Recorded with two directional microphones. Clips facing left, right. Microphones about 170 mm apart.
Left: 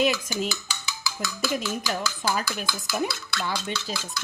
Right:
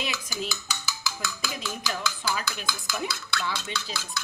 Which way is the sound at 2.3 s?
50° left (ahead or behind).